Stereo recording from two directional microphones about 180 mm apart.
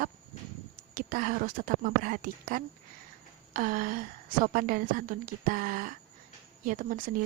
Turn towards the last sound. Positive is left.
turn(degrees=-50)  # may be behind; listen again after turning